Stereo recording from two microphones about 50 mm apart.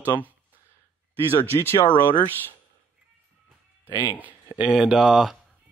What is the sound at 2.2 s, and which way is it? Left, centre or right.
Speech, left.